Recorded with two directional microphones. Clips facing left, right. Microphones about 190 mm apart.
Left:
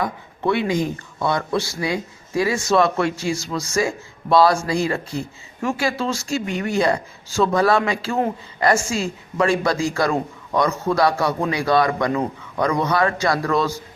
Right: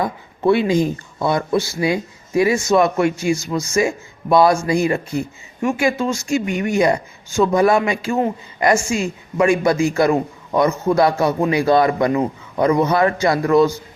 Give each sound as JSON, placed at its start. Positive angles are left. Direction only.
{"t": 0.0, "sound": "speech", "side_deg": -25}